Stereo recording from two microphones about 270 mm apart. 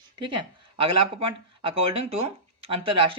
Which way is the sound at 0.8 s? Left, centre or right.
Right.